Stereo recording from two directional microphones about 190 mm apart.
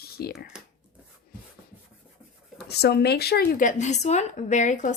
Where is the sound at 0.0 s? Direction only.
55° left (ahead or behind).